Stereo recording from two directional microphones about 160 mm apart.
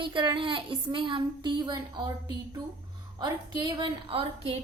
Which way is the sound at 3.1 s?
25° right (ahead or behind).